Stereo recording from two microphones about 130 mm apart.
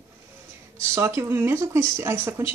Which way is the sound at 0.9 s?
20° right (ahead or behind).